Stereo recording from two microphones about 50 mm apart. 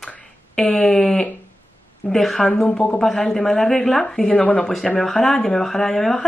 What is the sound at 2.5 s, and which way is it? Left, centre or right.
Speech, centre.